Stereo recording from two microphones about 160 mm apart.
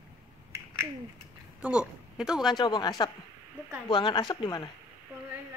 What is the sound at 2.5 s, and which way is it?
Speech, 25° left (ahead or behind).